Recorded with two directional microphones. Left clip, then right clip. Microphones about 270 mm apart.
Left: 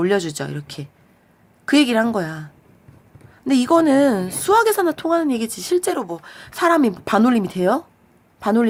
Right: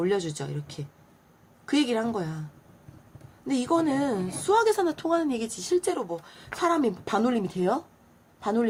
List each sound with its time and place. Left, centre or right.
0.0 s a woman's voice: left